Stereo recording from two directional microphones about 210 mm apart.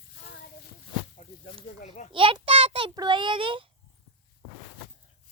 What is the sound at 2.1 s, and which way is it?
Child singing, 25° right (ahead or behind).